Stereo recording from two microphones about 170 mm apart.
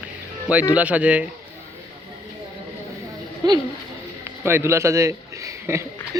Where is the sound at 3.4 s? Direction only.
25° right (ahead or behind).